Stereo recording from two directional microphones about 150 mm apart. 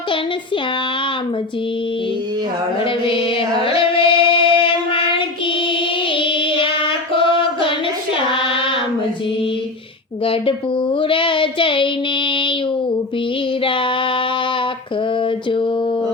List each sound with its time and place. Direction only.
2.8 s music: 35° left (ahead or behind)
6.1 s child singing: 35° left (ahead or behind)
10.2 s a child's voice: 35° left (ahead or behind)
12.3 s child singing: 35° left (ahead or behind)
13.7 s a child's voice: 35° left (ahead or behind)